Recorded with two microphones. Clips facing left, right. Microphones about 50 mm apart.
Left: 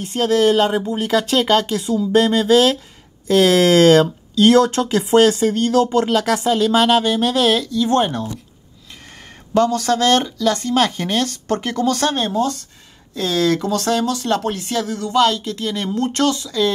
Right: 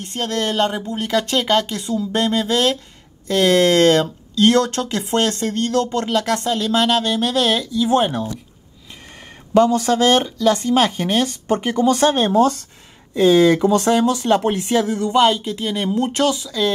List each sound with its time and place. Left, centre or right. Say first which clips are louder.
0.0 s speech: left 7 dB; centre
9.6 s speech: right 2 dB; centre